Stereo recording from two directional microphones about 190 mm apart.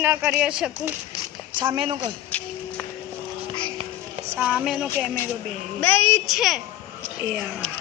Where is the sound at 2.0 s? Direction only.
5° left (ahead or behind).